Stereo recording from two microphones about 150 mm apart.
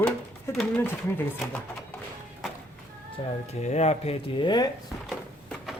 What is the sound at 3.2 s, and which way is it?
Speech, 40° left (ahead or behind).